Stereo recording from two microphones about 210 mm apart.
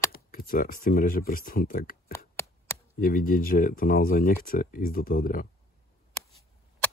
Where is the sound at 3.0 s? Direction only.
45° left (ahead or behind).